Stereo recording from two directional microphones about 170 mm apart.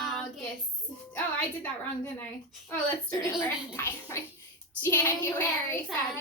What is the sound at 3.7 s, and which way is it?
Gargling, 15° left (ahead or behind).